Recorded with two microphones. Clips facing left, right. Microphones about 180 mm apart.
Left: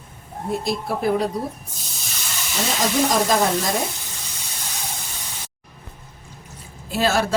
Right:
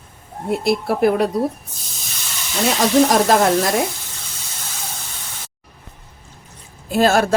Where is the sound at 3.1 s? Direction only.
70° right (ahead or behind).